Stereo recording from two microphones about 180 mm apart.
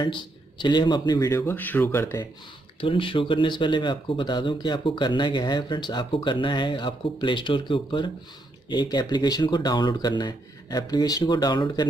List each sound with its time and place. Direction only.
0.0 s speech: 25° left (ahead or behind)
2.8 s speech: 30° left (ahead or behind)